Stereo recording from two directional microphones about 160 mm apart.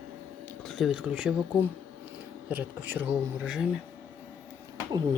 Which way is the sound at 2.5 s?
10° right (ahead or behind).